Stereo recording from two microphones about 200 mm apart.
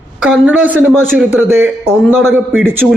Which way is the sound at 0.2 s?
5° right (ahead or behind).